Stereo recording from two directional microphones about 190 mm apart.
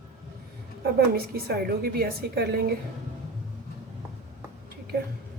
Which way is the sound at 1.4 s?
55° right (ahead or behind).